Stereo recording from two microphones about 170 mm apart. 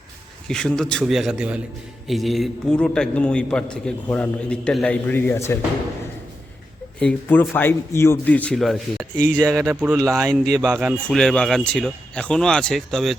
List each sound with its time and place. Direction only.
0.4 s a man's voice: 5° left (ahead or behind)
7.0 s speech: 10° left (ahead or behind)
9.3 s speech: 15° right (ahead or behind)
10.9 s a man's voice: 5° left (ahead or behind)